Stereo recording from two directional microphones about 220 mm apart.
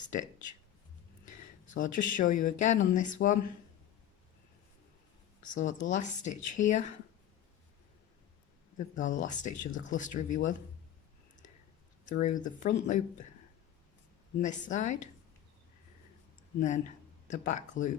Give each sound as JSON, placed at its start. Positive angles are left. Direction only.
{"t": 1.7, "sound": "speech", "side_deg": 35}
{"t": 5.5, "sound": "speech", "side_deg": 35}
{"t": 9.0, "sound": "speech", "side_deg": 35}
{"t": 12.0, "sound": "speech", "side_deg": 35}
{"t": 14.4, "sound": "speech", "side_deg": 35}
{"t": 16.6, "sound": "speech", "side_deg": 35}